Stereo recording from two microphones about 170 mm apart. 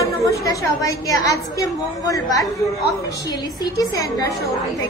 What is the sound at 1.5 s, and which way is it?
A woman's voice, 20° left (ahead or behind).